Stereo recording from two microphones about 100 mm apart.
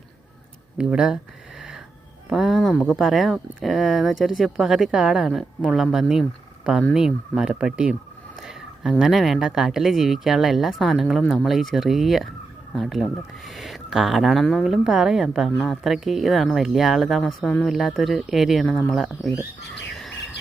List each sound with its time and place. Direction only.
0.8 s speech: 5° right (ahead or behind)
2.3 s speech: 5° right (ahead or behind)
17.4 s speech: 10° left (ahead or behind)
17.7 s speech: centre (ahead or behind)
18.6 s speech: 20° left (ahead or behind)
18.9 s speech: centre (ahead or behind)